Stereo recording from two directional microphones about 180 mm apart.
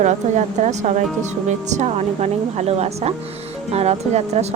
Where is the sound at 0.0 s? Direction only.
40° right (ahead or behind).